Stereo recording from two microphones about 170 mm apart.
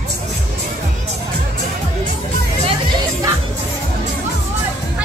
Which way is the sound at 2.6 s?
25° right (ahead or behind).